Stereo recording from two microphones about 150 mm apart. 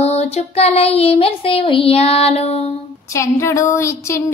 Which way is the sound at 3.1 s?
20° left (ahead or behind).